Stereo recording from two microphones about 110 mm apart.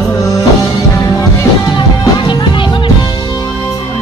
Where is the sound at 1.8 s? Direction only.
45° left (ahead or behind).